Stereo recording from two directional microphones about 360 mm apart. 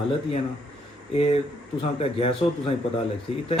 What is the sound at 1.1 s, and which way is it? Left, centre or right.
Speech, centre.